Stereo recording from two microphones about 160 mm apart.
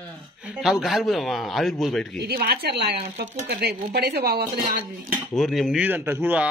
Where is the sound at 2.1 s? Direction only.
80° right; by 5.1 s 65° right (ahead or behind).